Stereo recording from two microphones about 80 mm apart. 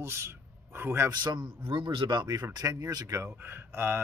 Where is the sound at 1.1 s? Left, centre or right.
Right.